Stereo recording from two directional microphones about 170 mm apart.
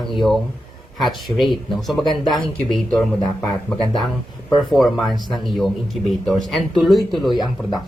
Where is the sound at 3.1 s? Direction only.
25° left (ahead or behind).